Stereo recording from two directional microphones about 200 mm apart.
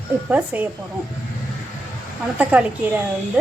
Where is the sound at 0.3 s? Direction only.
10° right (ahead or behind).